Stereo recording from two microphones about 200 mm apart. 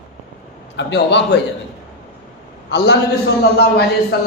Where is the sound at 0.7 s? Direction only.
60° left (ahead or behind).